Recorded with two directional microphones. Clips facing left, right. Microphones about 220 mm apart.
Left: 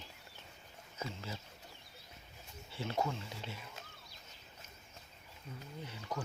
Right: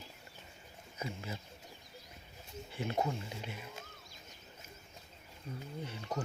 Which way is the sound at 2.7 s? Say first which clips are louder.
Right 2 dB; 15° right (ahead or behind).